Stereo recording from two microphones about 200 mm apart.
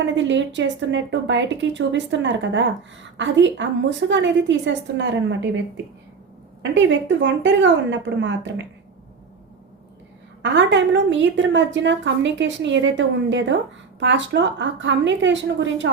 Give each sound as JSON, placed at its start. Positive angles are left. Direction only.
{"t": 0.0, "sound": "a woman's voice", "side_deg": -65}
{"t": 10.4, "sound": "a woman's voice", "side_deg": -60}